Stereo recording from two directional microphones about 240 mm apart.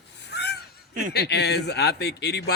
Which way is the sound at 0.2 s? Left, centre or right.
Left.